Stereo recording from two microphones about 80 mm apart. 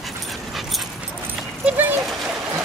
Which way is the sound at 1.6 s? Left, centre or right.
Right.